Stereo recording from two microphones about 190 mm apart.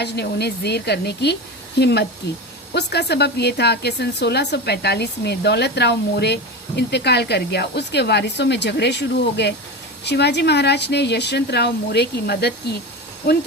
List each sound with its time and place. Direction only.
0.0 s a woman's voice: 60° left (ahead or behind)